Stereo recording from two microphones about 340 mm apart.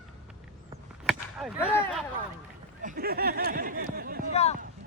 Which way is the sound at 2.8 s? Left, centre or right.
Right.